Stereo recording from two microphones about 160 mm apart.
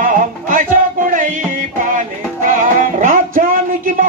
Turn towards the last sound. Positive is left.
turn(degrees=-60)  # may be behind; listen again after turning